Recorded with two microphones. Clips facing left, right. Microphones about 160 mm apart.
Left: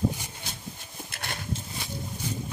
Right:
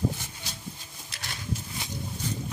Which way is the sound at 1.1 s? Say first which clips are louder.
Left 4 dB; 55° left (ahead or behind).